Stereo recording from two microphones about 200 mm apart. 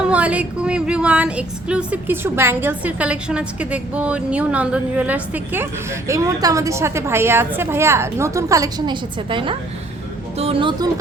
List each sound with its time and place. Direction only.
0.0 s a woman's voice: 5° right (ahead or behind); by 11.0 s 20° right (ahead or behind)